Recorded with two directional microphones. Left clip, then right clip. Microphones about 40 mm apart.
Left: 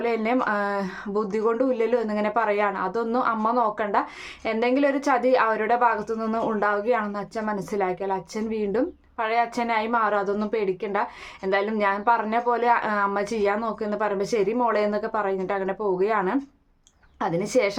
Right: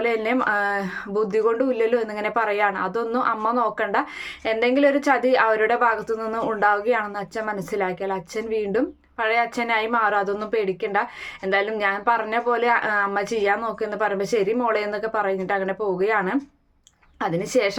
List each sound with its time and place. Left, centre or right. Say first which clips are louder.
0.3 s a woman's voice: right 2 dB; centre